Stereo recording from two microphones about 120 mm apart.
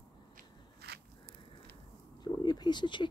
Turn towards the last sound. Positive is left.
turn(degrees=40)  # may be behind; listen again after turning